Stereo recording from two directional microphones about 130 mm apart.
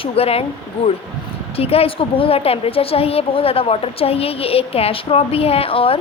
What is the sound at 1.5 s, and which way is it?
A woman's voice, 50° left (ahead or behind).